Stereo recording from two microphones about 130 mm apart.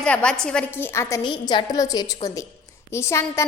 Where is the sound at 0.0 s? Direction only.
10° left (ahead or behind).